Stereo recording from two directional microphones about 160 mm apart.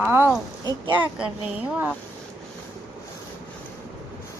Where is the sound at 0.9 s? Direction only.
10° right (ahead or behind).